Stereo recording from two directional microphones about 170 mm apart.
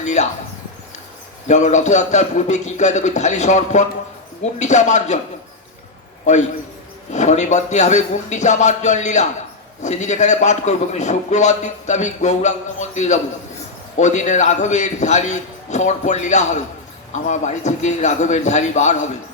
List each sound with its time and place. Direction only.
0.0 s speech: 45° left (ahead or behind)
1.5 s a man's voice: 45° left (ahead or behind)
7.1 s a man's voice: 45° left (ahead or behind)